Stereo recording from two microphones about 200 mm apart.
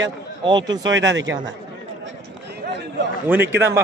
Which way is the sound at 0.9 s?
65° right (ahead or behind).